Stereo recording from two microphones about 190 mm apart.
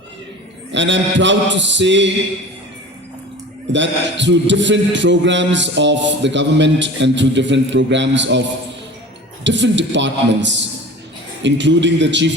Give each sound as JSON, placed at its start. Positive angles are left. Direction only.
{"t": 0.7, "sound": "a man's voice", "side_deg": -70}
{"t": 3.7, "sound": "a man's voice", "side_deg": -70}
{"t": 9.4, "sound": "a man's voice", "side_deg": -70}